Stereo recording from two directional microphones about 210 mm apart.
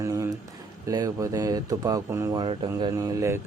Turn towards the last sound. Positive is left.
turn(degrees=-15)  # may be behind; listen again after turning